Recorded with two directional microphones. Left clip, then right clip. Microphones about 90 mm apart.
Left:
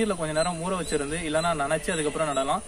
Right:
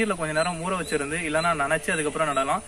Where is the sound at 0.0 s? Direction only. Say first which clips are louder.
Right 1 dB; 20° left (ahead or behind).